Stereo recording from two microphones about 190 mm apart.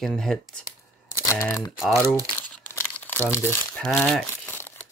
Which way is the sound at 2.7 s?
10° left (ahead or behind).